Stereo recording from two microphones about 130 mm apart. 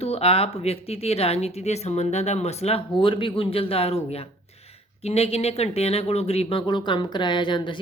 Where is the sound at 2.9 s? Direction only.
40° left (ahead or behind).